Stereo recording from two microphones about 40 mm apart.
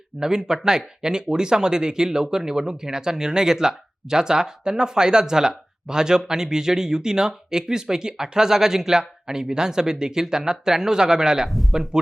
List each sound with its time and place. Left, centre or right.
0.2 s speech: centre
11.4 s speech: centre